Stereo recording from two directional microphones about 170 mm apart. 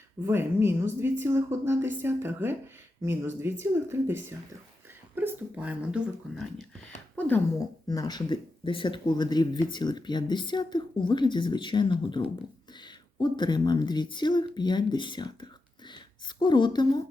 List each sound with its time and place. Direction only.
0.3 s speech: 15° right (ahead or behind)
7.2 s a woman's voice: 10° left (ahead or behind)
7.9 s speech: 25° left (ahead or behind)